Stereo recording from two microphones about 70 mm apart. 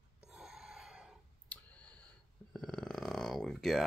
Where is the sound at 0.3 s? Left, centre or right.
Centre.